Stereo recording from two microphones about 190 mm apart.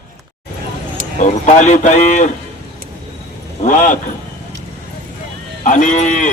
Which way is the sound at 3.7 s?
40° left (ahead or behind).